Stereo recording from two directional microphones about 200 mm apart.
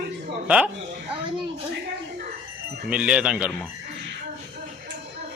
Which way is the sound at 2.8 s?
5° right (ahead or behind).